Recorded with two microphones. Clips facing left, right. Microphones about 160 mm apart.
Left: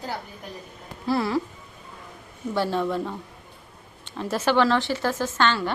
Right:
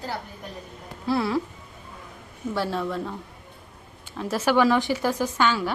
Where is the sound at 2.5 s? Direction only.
Centre (ahead or behind).